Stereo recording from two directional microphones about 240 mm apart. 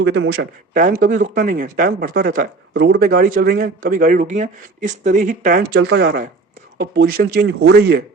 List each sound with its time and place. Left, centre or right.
0.0 s speech: right
5.7 s speech: right